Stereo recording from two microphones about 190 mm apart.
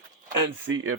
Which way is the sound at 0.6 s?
90° right.